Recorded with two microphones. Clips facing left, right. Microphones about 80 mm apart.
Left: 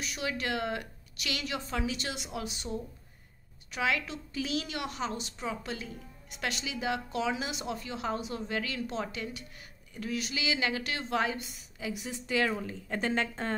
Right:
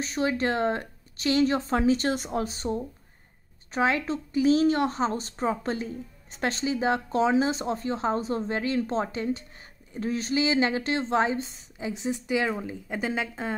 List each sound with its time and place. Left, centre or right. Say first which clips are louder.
0.0 s a woman's voice: right 8 dB; right; by 13.6 s centre